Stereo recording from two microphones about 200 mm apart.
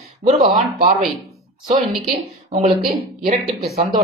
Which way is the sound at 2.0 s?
35° right (ahead or behind).